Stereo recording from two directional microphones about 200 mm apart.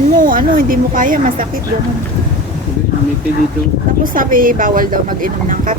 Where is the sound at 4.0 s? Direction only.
45° right (ahead or behind).